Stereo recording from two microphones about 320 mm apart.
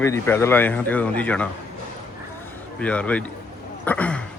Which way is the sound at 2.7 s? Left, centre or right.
Centre.